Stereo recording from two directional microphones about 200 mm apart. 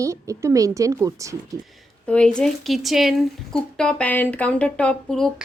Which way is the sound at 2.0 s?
5° left (ahead or behind).